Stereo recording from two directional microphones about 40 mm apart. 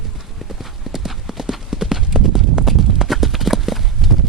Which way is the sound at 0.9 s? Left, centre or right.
Centre.